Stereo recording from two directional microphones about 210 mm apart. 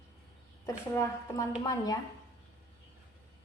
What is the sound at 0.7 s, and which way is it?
A woman's voice, 15° left (ahead or behind).